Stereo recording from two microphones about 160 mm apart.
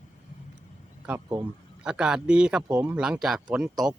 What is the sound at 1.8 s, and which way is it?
A man's voice, 5° right (ahead or behind).